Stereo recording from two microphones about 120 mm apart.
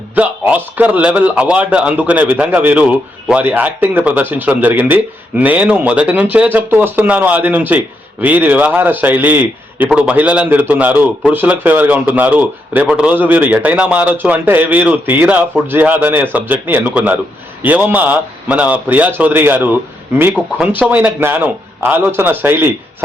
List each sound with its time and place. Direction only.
0.2 s a man's voice: 10° right (ahead or behind)